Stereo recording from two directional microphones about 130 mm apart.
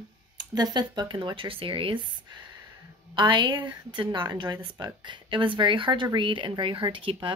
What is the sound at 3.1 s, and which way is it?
Speech, 35° right (ahead or behind).